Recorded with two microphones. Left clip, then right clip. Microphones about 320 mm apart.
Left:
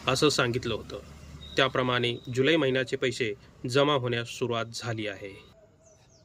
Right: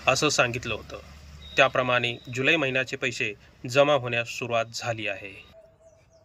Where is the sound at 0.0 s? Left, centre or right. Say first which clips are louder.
Right 3 dB; centre.